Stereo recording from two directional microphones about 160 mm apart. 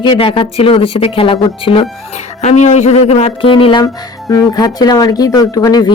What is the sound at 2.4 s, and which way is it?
Speech, 45° left (ahead or behind).